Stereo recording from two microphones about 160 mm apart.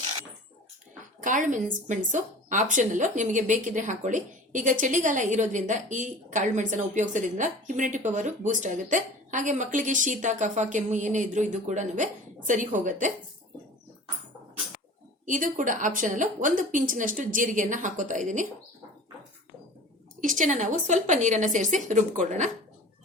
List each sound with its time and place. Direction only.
1.2 s a woman's voice: 55° right (ahead or behind)
15.3 s a woman's voice: 55° right (ahead or behind)
20.2 s a woman's voice: 50° right (ahead or behind)